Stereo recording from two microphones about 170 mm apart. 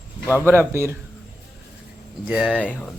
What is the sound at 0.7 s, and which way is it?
Speech, 15° right (ahead or behind).